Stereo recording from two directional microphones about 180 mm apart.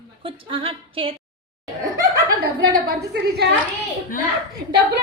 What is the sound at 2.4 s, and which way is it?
A woman's voice, 55° right (ahead or behind).